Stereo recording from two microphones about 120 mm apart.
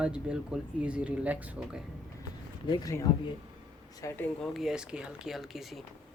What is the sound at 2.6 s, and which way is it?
Speech, 40° left (ahead or behind).